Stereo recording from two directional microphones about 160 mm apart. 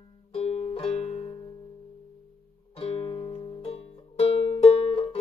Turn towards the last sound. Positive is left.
turn(degrees=35)  # may be behind; listen again after turning